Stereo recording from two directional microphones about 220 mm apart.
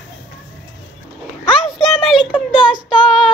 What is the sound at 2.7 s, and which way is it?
Child singing, 5° right (ahead or behind).